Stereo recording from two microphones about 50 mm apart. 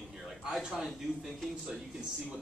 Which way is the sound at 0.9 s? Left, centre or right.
Centre.